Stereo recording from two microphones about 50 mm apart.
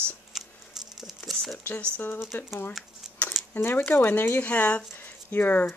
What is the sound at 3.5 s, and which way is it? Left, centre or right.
Speech, left.